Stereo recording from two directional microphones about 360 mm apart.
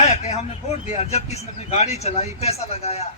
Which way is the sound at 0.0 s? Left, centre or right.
Centre.